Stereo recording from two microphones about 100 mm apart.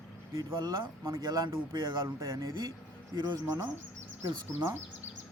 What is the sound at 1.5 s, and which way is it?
Speech, 55° right (ahead or behind).